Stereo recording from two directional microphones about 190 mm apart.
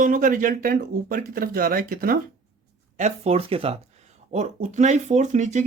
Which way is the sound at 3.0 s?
35° right (ahead or behind).